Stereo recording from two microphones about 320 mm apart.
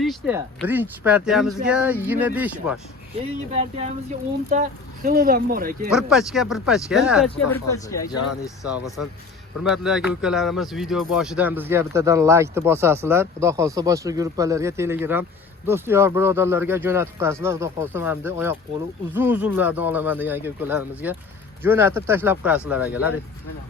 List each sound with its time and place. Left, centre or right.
0.0 s speech: centre
3.2 s speech: centre
5.9 s speech: centre
7.5 s speech: centre
8.1 s speech: left
9.6 s speech: centre